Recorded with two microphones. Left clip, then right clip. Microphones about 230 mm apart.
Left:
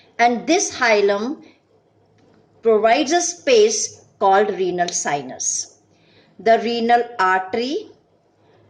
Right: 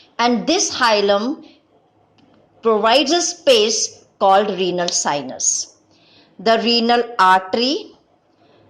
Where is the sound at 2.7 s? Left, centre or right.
Centre.